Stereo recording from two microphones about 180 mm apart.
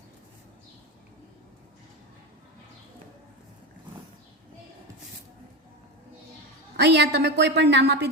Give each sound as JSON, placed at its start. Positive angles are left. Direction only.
{"t": 6.7, "sound": "a woman's voice", "side_deg": -70}